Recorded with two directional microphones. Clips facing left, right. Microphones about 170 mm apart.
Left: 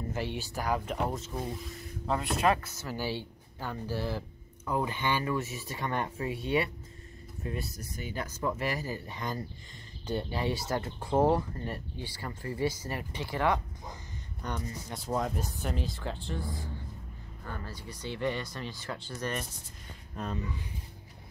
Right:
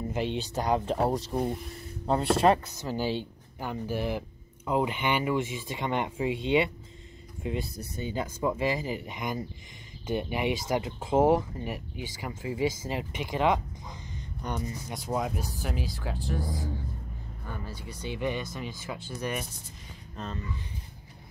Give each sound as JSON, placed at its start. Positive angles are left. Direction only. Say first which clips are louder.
{"t": 0.1, "sound": "speech", "louder": "right 5 dB", "side_deg": -20}
{"t": 2.6, "sound": "speech", "louder": "right 5 dB", "side_deg": -15}
{"t": 12.6, "sound": "speech", "louder": "right 2 dB", "side_deg": -90}
{"t": 12.9, "sound": "speech", "louder": "right 3 dB", "side_deg": -20}
{"t": 16.2, "sound": "speech", "louder": "right 4 dB", "side_deg": -40}
{"t": 17.5, "sound": "speech", "louder": "right 1 dB", "side_deg": -10}
{"t": 20.2, "sound": "speech", "louder": "left 2 dB", "side_deg": 10}